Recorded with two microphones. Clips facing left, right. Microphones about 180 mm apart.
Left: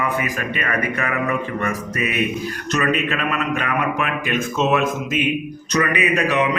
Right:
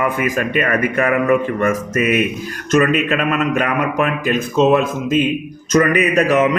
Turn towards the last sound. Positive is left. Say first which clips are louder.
# right 5 dB
turn(degrees=-45)  # may be behind; listen again after turning